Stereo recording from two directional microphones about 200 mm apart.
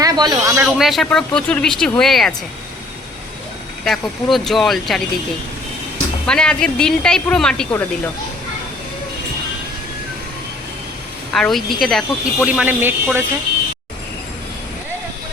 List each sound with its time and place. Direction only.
0.0 s speech: 20° right (ahead or behind)
0.8 s speech: centre (ahead or behind)
3.8 s speech: centre (ahead or behind)
6.2 s speech: 5° left (ahead or behind)
11.3 s speech: centre (ahead or behind)